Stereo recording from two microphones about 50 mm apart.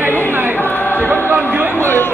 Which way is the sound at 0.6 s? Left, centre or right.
Left.